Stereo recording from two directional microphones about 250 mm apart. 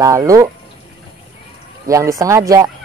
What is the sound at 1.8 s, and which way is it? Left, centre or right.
Speech, centre.